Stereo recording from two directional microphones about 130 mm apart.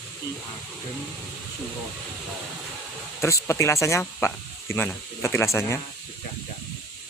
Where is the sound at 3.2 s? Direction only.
20° left (ahead or behind).